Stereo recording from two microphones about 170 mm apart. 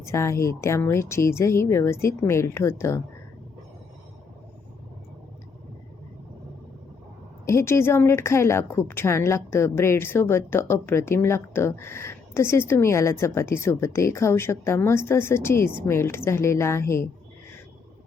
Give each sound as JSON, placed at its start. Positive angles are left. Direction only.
{"t": 0.0, "sound": "a woman's voice", "side_deg": 15}
{"t": 7.4, "sound": "a woman's voice", "side_deg": 15}